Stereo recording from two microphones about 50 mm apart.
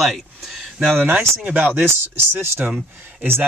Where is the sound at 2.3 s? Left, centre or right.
Right.